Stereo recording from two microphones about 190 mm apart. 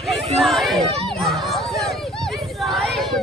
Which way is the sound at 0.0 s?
Centre (ahead or behind).